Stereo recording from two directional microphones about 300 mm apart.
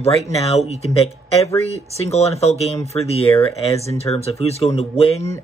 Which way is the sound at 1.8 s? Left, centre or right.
Left.